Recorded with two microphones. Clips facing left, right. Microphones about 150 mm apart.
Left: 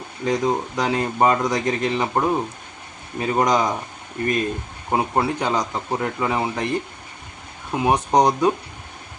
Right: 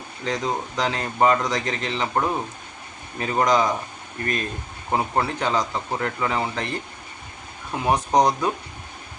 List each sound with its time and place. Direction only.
0.3 s speech: 15° left (ahead or behind)
4.9 s speech: 15° left (ahead or behind)